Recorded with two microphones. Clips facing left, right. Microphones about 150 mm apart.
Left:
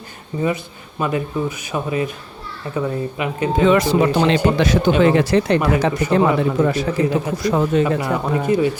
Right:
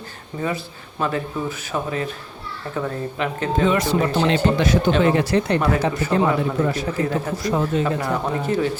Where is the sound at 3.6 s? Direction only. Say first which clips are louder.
Left 5 dB; 90° left.